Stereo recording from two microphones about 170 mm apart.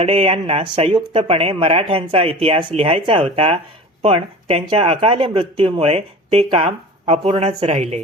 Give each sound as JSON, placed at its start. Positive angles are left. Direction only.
{"t": 0.0, "sound": "speech", "side_deg": -35}